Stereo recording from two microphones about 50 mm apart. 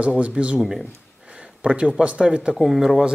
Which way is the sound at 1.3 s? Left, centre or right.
Right.